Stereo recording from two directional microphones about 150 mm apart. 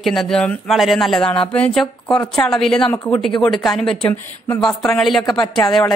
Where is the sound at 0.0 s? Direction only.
Centre (ahead or behind).